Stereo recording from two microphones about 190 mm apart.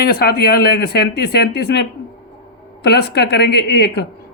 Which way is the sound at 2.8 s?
60° left (ahead or behind).